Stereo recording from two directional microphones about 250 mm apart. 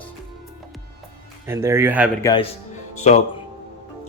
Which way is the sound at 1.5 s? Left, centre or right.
Centre.